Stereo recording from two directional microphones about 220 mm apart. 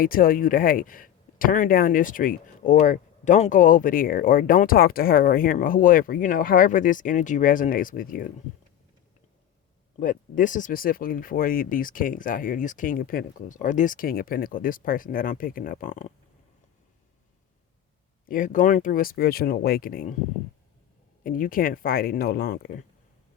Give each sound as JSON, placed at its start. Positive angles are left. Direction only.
{"t": 0.0, "sound": "speech", "side_deg": 40}
{"t": 10.0, "sound": "speech", "side_deg": 35}
{"t": 18.3, "sound": "speech", "side_deg": 35}
{"t": 21.2, "sound": "speech", "side_deg": 40}